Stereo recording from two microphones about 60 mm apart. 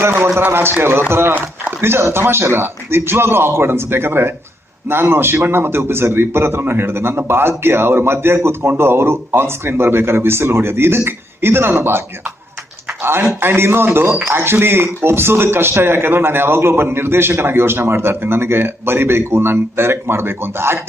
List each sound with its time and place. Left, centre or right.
0.0 s a man's voice: right
12.9 s a sound: right
13.4 s a man's voice: right